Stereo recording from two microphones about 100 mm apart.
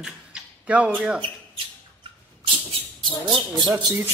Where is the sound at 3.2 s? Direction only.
55° right (ahead or behind).